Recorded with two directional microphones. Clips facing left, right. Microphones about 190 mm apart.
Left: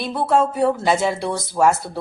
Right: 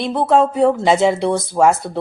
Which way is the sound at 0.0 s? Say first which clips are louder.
Right 4 dB; 20° right (ahead or behind).